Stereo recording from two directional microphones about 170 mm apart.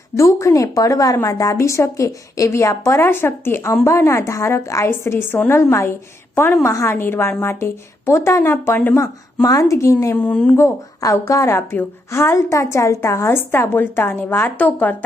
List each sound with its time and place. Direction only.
0.2 s a woman's voice: 15° left (ahead or behind)